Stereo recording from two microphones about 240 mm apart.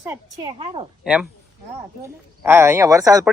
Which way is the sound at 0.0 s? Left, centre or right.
Centre.